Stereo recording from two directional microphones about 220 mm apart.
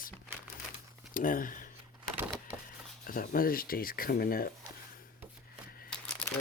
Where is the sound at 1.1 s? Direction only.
40° left (ahead or behind).